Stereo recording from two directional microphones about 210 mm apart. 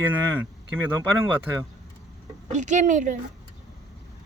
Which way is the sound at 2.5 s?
35° right (ahead or behind).